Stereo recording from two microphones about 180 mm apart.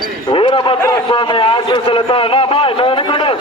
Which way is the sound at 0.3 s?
25° left (ahead or behind).